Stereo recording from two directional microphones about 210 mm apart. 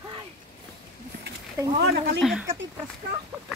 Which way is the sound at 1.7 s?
50° right (ahead or behind).